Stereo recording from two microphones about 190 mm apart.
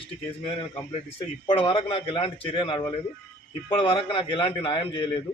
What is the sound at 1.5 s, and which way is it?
A man's voice, 30° left (ahead or behind).